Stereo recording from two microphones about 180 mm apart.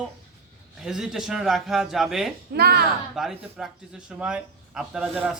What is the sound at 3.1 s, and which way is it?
A man's voice, centre (ahead or behind).